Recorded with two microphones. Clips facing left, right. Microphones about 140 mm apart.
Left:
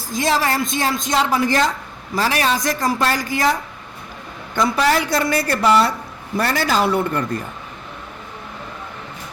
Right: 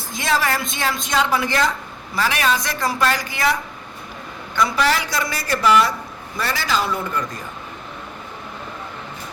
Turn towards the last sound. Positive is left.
turn(degrees=60)  # may be behind; listen again after turning